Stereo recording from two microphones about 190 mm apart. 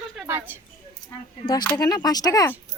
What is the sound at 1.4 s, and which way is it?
Speech, 20° left (ahead or behind).